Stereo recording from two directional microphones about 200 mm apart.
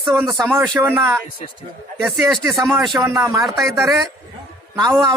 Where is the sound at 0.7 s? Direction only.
15° right (ahead or behind).